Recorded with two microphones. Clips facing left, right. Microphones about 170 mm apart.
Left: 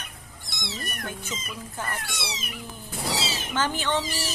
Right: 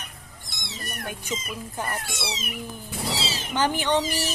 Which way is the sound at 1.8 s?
20° right (ahead or behind).